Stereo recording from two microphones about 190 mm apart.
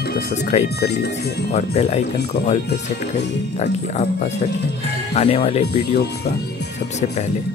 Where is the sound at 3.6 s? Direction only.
35° left (ahead or behind).